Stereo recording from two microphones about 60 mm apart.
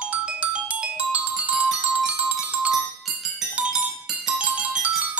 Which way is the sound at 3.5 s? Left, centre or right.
Centre.